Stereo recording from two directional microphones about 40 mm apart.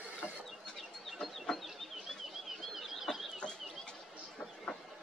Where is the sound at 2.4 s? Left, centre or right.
Centre.